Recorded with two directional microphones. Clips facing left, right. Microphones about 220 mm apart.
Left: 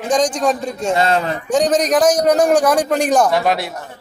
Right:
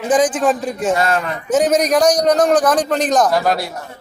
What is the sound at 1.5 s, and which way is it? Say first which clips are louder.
A man's voice: right 1 dB; centre (ahead or behind).